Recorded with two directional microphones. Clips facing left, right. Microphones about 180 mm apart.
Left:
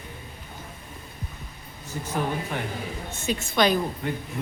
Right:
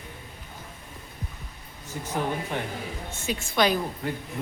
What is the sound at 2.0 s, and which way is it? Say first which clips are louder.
A woman's voice: left 1 dB; 15° right (ahead or behind).